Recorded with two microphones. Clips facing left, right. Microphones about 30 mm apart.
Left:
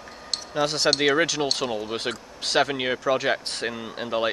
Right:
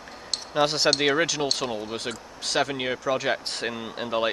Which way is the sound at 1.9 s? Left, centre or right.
Centre.